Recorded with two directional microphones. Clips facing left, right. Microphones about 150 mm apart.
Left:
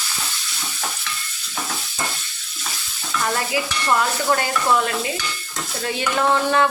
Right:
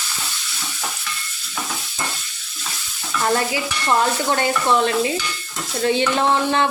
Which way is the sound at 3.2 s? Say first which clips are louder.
Right 3 dB; 30° right (ahead or behind).